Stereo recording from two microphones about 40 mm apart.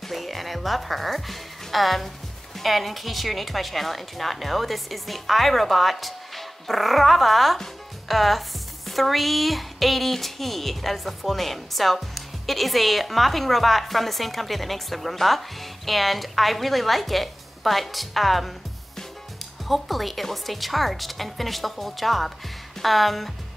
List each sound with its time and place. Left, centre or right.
0.1 s a woman's voice: centre
19.7 s a woman's voice: centre